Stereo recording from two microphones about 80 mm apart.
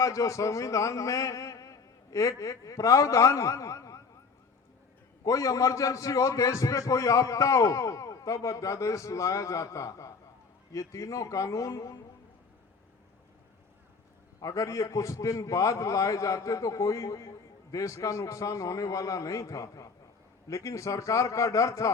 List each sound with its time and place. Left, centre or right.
0.0 s speech: left
5.2 s a man's voice: left
14.4 s a man's voice: left